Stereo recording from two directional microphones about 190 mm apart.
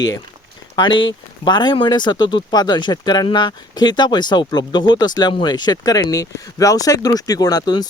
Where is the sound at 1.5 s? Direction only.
25° left (ahead or behind).